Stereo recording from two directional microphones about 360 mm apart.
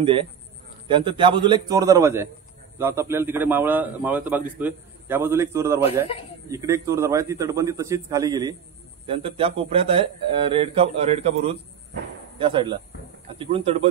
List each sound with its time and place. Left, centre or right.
0.0 s a man's voice: centre